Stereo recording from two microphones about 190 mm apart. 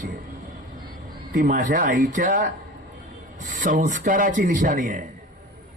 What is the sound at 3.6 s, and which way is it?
A man's voice, 40° right (ahead or behind).